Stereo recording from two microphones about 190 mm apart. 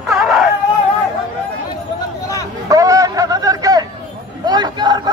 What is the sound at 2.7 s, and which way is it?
Speech, 20° right (ahead or behind).